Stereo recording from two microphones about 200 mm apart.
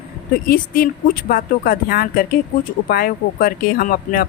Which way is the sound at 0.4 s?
45° left (ahead or behind).